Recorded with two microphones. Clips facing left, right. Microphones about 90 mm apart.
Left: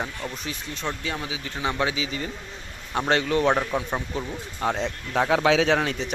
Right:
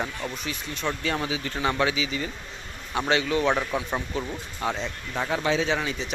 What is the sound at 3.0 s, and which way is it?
Speech, 45° left (ahead or behind).